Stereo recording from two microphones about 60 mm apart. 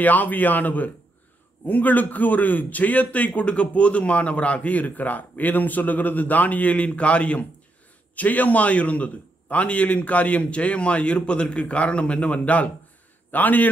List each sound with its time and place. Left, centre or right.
0.0 s a man's voice: left